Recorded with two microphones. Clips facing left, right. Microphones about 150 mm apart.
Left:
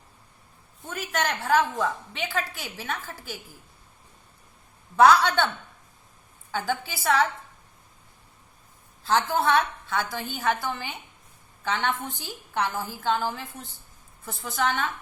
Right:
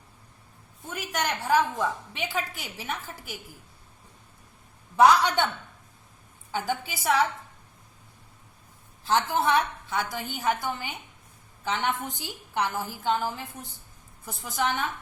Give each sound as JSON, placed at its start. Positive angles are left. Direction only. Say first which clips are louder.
{"t": 0.9, "sound": "a woman's voice", "louder": "left 2 dB", "side_deg": -10}
{"t": 4.9, "sound": "a woman's voice", "louder": "left 1 dB", "side_deg": -15}
{"t": 6.5, "sound": "a woman's voice", "louder": "left 1 dB", "side_deg": -15}
{"t": 9.0, "sound": "a woman's voice", "louder": "left 1 dB", "side_deg": -15}